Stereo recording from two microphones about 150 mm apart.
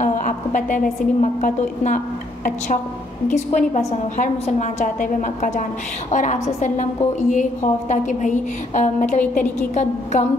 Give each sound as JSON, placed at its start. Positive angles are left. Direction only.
{"t": 0.0, "sound": "a woman's voice", "side_deg": 55}
{"t": 3.3, "sound": "a woman's voice", "side_deg": 55}